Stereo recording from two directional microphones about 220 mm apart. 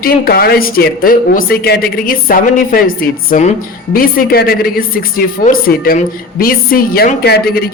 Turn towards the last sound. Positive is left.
turn(degrees=45)  # may be behind; listen again after turning